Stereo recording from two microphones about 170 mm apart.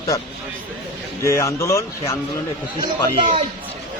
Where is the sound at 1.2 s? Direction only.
15° left (ahead or behind).